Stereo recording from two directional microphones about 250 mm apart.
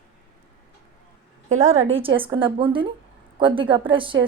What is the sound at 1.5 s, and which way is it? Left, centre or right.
A woman's voice, right.